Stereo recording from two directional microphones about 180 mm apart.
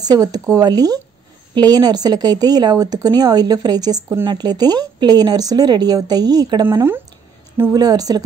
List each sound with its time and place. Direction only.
0.0 s speech: 20° right (ahead or behind)